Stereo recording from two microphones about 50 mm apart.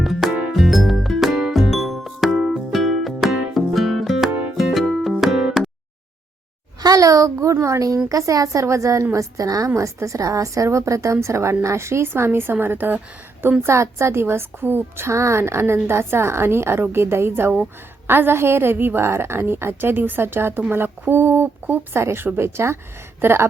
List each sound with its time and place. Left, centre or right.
0.0 s music: centre
7.2 s a woman's voice: right
13.4 s a woman's voice: right
13.7 s a woman's voice: right
15.0 s a woman's voice: right